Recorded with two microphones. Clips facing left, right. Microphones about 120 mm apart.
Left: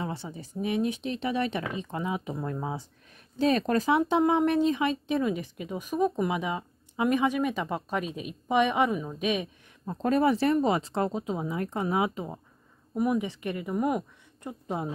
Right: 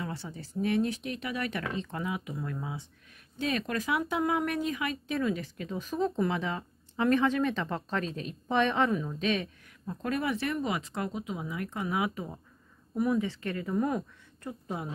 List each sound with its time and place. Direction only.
0.0 s speech: 20° left (ahead or behind)
9.8 s speech: 30° left (ahead or behind)